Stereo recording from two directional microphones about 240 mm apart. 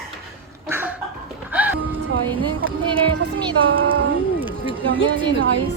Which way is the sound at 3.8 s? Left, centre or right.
Right.